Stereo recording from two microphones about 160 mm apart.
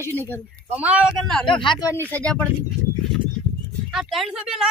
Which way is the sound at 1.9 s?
10° left (ahead or behind).